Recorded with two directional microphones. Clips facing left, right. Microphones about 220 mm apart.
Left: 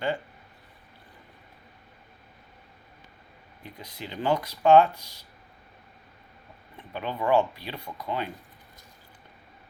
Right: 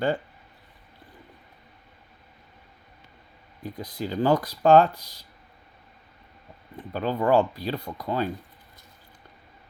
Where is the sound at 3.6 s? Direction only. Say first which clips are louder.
Right 9 dB; 35° right (ahead or behind).